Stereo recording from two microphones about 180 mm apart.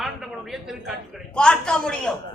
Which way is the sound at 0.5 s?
Centre (ahead or behind).